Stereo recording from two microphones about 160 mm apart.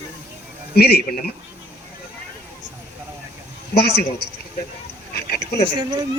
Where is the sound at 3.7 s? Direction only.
80° left.